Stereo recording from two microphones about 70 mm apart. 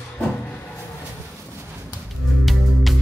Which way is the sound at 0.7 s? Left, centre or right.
Left.